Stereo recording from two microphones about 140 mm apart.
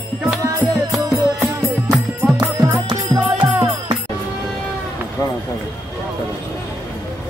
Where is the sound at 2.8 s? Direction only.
35° right (ahead or behind).